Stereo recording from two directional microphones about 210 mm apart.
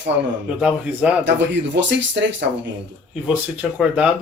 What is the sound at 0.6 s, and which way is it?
Speech, 5° right (ahead or behind).